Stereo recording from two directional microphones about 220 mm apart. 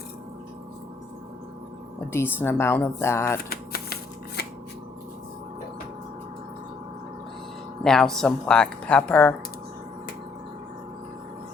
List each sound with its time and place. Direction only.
2.1 s speech: 10° left (ahead or behind)
3.5 s typewriter: 45° left (ahead or behind)
7.9 s speech: centre (ahead or behind)